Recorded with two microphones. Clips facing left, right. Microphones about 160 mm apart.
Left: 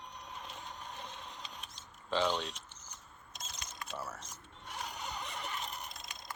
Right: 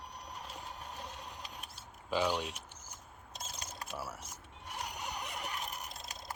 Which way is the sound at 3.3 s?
30° right (ahead or behind).